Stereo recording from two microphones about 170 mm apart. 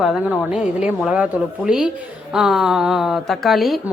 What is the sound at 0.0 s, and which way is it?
A woman's voice, 5° right (ahead or behind).